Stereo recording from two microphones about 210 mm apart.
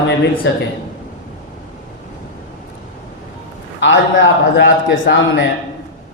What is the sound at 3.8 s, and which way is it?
A man's voice, 60° left (ahead or behind).